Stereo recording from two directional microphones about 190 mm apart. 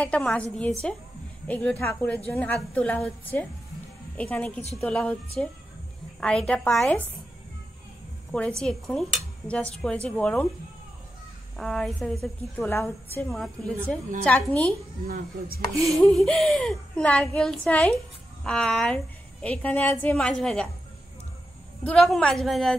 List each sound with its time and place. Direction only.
0.0 s a woman's voice: 5° left (ahead or behind)
8.3 s a woman's voice: 5° left (ahead or behind)
11.5 s a woman's voice: centre (ahead or behind)
15.0 s speech: 50° right (ahead or behind)
15.8 s a woman's voice: centre (ahead or behind)
21.8 s a woman's voice: centre (ahead or behind)